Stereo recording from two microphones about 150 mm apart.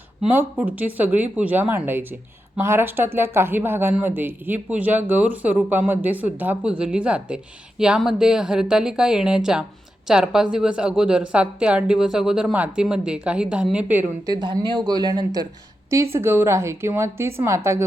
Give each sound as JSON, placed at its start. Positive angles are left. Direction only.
{"t": 0.3, "sound": "a woman's voice", "side_deg": -10}
{"t": 14.3, "sound": "speech", "side_deg": -25}
{"t": 16.1, "sound": "speech", "side_deg": -15}